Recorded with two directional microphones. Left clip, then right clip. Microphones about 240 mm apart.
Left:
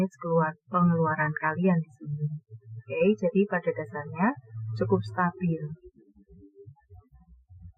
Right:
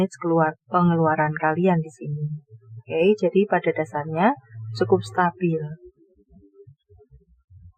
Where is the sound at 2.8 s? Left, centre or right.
Right.